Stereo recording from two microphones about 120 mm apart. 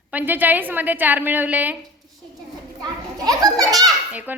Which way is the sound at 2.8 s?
30° right (ahead or behind).